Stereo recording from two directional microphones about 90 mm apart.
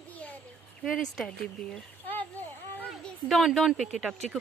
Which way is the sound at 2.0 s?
20° left (ahead or behind).